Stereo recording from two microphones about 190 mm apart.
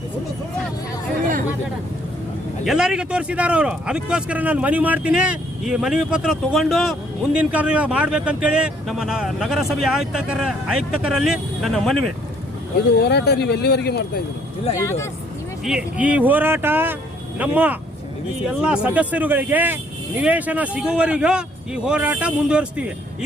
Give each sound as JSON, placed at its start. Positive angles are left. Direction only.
{"t": 2.6, "sound": "speech", "side_deg": -5}
{"t": 13.0, "sound": "speech", "side_deg": 60}
{"t": 14.8, "sound": "speech", "side_deg": 15}
{"t": 15.6, "sound": "speech", "side_deg": -5}